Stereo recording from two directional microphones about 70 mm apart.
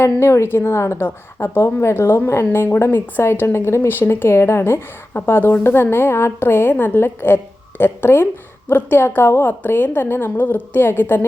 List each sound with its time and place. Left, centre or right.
0.0 s a woman's voice: left